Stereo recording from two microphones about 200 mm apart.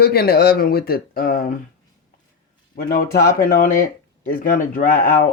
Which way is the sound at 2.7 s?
45° left (ahead or behind).